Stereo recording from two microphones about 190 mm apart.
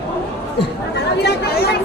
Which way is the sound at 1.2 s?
60° left (ahead or behind).